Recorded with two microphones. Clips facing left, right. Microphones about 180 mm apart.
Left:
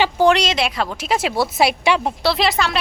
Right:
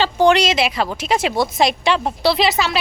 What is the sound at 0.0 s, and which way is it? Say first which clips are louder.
A woman's voice: right 1 dB; 5° left (ahead or behind).